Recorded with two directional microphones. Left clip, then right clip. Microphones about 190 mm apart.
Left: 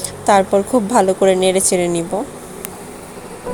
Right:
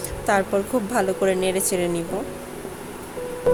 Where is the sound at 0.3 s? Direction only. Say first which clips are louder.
Left 8 dB; 20° left (ahead or behind).